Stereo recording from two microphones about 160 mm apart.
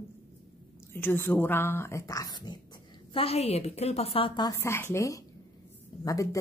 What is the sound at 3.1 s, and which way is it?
A woman's voice, 40° left (ahead or behind).